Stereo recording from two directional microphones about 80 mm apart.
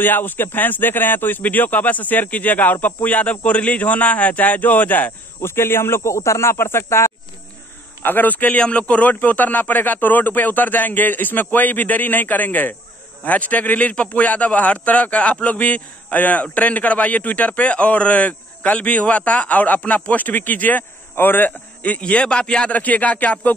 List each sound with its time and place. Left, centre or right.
0.0 s a man's voice: left